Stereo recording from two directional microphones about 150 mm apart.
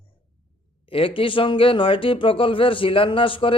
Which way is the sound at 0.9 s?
35° left (ahead or behind).